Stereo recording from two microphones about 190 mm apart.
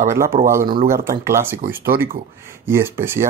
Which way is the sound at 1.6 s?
50° right (ahead or behind).